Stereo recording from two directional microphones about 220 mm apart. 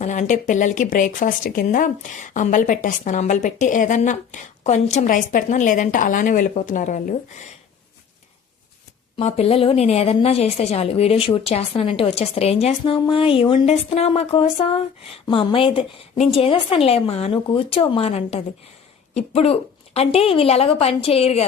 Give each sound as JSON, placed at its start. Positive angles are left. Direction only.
{"t": 0.0, "sound": "speech", "side_deg": 35}
{"t": 9.1, "sound": "a woman's voice", "side_deg": 30}